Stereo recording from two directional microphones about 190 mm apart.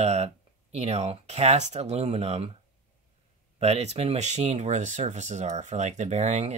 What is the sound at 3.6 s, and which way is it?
Speech, 35° right (ahead or behind).